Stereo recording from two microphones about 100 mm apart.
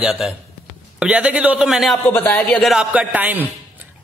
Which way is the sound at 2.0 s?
20° left (ahead or behind).